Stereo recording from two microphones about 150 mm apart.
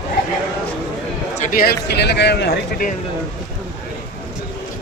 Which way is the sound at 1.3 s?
65° left (ahead or behind).